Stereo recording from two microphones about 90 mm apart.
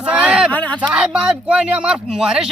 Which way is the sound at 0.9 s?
10° right (ahead or behind).